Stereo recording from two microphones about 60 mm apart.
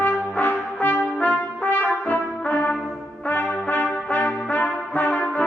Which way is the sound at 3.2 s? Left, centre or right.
Left.